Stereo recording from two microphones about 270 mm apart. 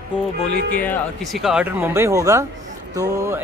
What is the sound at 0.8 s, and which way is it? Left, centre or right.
Speech, centre.